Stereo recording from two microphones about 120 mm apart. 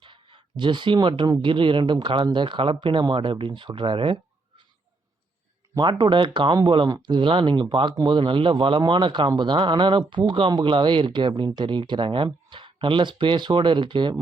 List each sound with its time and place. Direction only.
0.0 s speech: 40° right (ahead or behind)
5.7 s speech: 40° right (ahead or behind)